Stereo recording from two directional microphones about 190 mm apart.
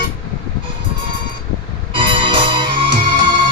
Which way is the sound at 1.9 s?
25° right (ahead or behind).